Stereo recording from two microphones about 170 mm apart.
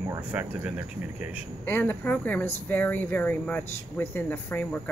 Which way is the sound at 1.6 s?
10° left (ahead or behind).